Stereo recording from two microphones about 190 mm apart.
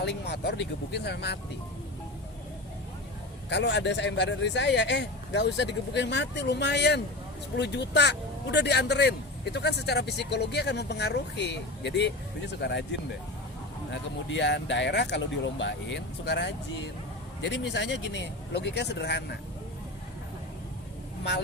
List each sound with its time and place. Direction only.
0.0 s speech: 65° left (ahead or behind)
3.5 s speech: 65° left (ahead or behind)
13.9 s speech: 70° left (ahead or behind)